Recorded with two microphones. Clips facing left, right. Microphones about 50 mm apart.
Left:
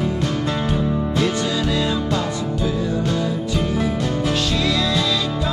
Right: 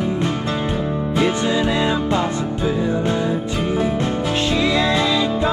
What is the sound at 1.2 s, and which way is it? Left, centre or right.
Music, right.